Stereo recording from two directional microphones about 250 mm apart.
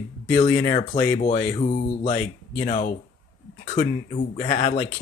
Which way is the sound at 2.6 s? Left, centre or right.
Left.